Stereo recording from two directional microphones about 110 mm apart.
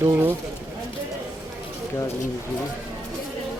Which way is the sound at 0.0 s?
20° right (ahead or behind).